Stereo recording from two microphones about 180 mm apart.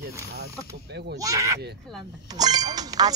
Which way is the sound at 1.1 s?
20° right (ahead or behind).